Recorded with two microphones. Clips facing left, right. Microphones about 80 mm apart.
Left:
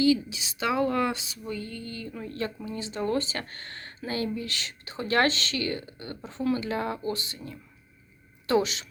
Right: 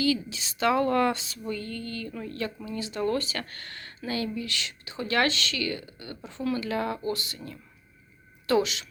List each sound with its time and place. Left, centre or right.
0.0 s speech: centre